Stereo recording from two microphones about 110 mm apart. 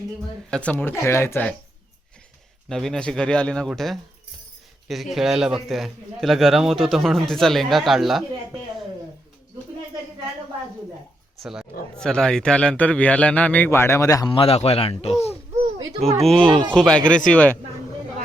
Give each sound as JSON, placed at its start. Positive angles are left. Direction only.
{"t": 0.5, "sound": "speech", "side_deg": 10}
{"t": 2.6, "sound": "a man's voice", "side_deg": 5}
{"t": 11.9, "sound": "speech", "side_deg": 5}
{"t": 13.7, "sound": "speech", "side_deg": 25}
{"t": 14.3, "sound": "speech", "side_deg": 60}
{"t": 16.2, "sound": "a man's voice", "side_deg": 5}